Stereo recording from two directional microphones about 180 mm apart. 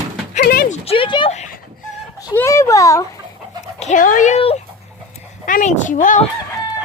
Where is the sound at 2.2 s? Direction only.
15° left (ahead or behind).